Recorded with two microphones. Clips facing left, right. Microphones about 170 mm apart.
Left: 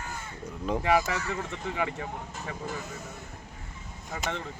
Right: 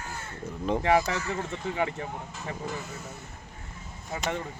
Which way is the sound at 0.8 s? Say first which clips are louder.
Right 1 dB; 25° right (ahead or behind).